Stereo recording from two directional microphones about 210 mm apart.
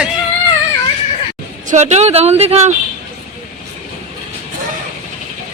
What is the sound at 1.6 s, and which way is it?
Speech, 35° right (ahead or behind).